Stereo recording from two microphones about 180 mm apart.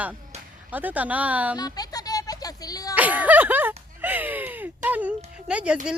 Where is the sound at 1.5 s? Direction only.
20° left (ahead or behind).